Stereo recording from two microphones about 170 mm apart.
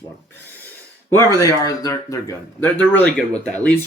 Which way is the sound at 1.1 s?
15° left (ahead or behind).